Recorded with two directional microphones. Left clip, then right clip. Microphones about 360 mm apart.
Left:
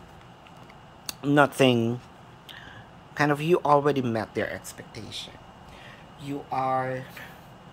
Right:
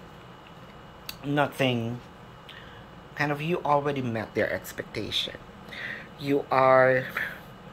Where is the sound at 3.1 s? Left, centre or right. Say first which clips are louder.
Left 5 dB; centre.